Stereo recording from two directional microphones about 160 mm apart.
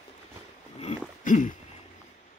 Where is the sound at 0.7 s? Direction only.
50° left (ahead or behind).